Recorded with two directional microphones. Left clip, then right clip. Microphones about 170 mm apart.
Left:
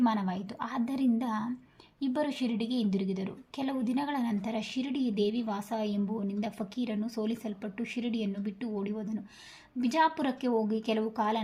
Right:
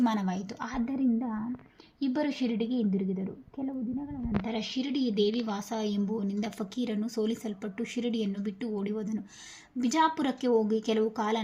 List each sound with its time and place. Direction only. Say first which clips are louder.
0.0 s a woman's voice: even; 20° right (ahead or behind); by 1.5 s centre (ahead or behind)
2.0 s a woman's voice: right 1 dB; 15° right (ahead or behind)
3.1 s a woman's voice: even; 5° left (ahead or behind); by 11.4 s 20° right (ahead or behind)